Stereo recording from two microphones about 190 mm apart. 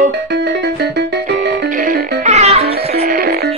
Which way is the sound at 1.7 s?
45° right (ahead or behind).